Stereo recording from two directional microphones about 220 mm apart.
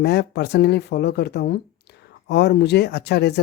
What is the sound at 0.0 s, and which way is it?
Speech, 50° left (ahead or behind).